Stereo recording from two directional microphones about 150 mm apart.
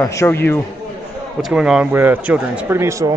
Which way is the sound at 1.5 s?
5° right (ahead or behind).